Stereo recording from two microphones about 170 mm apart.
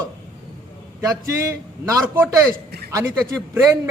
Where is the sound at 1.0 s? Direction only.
15° right (ahead or behind).